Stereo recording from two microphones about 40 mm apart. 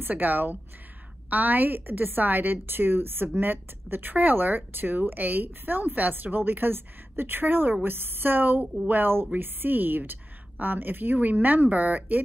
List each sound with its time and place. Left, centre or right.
0.0 s a woman's voice: right